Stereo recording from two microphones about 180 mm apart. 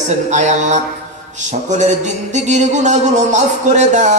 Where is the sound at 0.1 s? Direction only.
40° right (ahead or behind).